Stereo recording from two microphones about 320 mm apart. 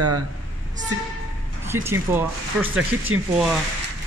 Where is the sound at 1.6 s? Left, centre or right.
Centre.